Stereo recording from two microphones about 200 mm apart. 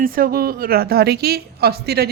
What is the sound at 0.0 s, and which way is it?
A woman's voice, 45° right (ahead or behind).